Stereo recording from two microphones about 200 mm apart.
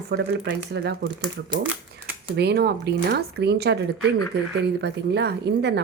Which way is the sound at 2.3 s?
55° right (ahead or behind).